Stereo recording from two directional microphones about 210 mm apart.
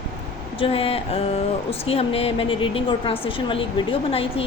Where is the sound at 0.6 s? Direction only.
25° left (ahead or behind).